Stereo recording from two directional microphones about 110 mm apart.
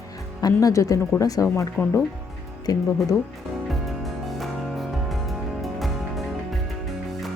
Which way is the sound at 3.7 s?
Centre (ahead or behind).